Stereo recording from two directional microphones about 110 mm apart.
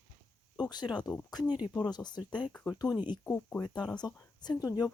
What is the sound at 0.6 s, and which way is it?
Speech, 40° left (ahead or behind).